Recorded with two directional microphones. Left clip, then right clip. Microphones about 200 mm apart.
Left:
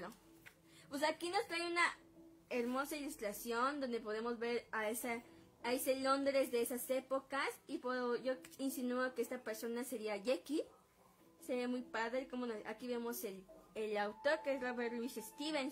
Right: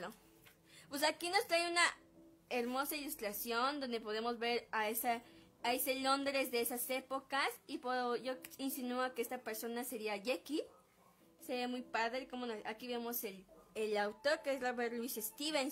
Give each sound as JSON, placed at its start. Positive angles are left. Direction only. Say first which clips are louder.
{"t": 0.8, "sound": "a woman's voice", "louder": "right 2 dB", "side_deg": -15}